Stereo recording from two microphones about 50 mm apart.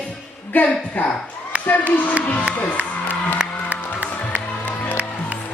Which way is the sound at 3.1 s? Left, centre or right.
Left.